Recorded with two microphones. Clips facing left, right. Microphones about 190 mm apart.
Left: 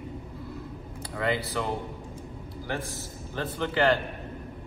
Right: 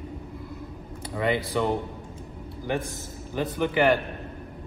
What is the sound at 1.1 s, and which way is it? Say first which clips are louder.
Speech: right 3 dB; 20° right (ahead or behind).